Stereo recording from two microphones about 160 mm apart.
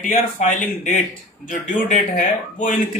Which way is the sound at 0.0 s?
50° left (ahead or behind).